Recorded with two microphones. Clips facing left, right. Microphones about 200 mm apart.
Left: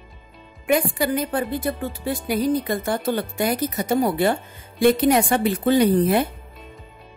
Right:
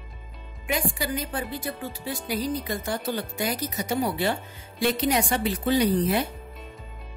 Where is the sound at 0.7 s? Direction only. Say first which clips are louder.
Left 7 dB; 55° left (ahead or behind).